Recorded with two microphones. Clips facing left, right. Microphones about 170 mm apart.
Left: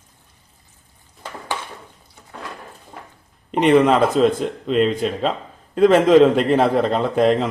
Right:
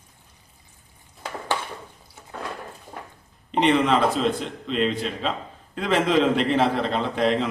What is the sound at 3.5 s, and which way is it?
A man's voice, 50° left (ahead or behind).